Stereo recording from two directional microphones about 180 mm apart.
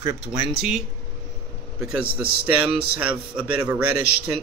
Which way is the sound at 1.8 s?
5° right (ahead or behind).